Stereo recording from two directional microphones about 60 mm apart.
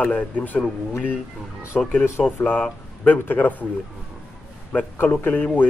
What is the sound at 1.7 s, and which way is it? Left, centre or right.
Speech, centre.